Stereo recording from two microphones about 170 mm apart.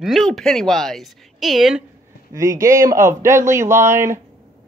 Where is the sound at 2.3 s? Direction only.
20° right (ahead or behind).